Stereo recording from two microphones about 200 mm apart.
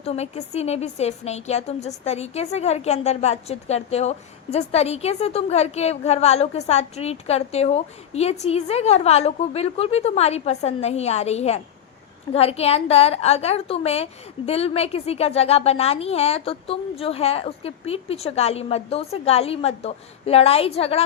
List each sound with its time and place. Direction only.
0.0 s a woman's voice: 30° left (ahead or behind)